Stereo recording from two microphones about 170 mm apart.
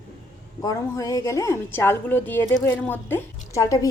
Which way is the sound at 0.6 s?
20° left (ahead or behind).